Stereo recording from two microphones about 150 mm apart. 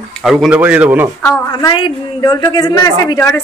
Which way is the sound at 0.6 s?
10° right (ahead or behind).